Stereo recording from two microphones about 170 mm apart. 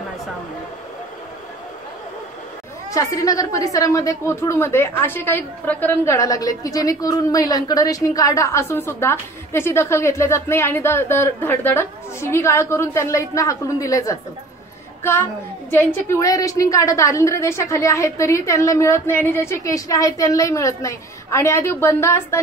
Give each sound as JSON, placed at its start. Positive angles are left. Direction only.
{"t": 2.9, "sound": "a woman's voice", "side_deg": 20}
{"t": 15.7, "sound": "a woman's voice", "side_deg": 15}